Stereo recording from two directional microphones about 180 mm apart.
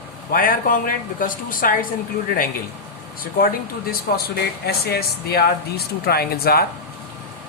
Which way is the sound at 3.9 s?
60° left (ahead or behind).